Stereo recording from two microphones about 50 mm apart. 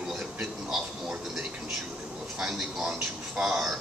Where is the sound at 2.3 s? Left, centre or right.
Centre.